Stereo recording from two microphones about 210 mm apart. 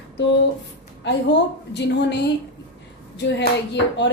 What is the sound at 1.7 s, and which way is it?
A woman's voice, 55° left (ahead or behind).